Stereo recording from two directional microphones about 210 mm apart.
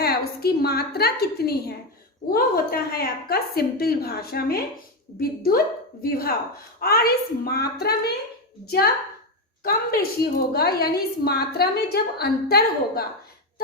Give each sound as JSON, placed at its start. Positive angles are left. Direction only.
{"t": 0.0, "sound": "a woman's voice", "side_deg": 45}
{"t": 6.0, "sound": "a woman's voice", "side_deg": 45}